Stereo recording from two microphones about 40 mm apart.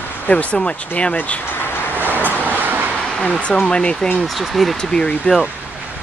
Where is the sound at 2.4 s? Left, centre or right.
Right.